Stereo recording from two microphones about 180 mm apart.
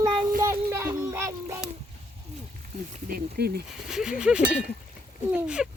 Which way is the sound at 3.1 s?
60° right (ahead or behind).